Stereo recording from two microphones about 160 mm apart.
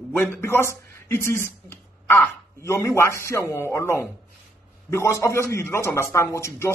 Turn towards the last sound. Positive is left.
turn(degrees=20)  # may be behind; listen again after turning